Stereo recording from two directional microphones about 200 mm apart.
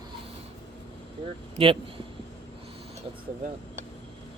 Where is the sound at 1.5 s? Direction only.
25° right (ahead or behind).